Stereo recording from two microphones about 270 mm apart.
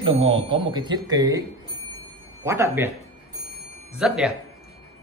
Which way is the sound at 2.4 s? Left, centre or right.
Centre.